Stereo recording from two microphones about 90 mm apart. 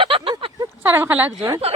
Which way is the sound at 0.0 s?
85° right.